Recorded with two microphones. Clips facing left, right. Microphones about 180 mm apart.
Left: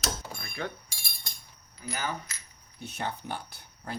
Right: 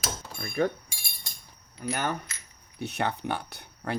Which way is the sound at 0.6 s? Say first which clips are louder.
Right 10 dB; 40° right (ahead or behind).